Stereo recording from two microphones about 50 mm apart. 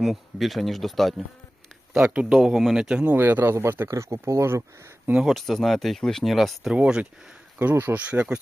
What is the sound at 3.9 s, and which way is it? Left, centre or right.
Speech, right.